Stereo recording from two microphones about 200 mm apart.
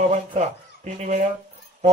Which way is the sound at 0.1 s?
35° right (ahead or behind).